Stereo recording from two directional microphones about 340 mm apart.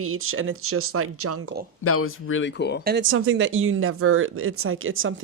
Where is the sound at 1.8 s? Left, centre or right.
Left.